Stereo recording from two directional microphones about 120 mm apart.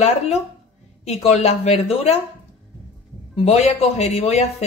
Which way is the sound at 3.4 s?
55° left (ahead or behind).